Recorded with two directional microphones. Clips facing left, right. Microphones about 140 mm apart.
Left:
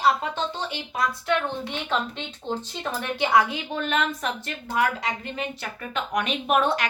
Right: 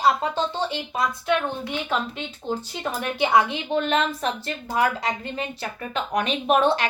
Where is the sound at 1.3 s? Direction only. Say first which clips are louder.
Right 2 dB; 15° right (ahead or behind).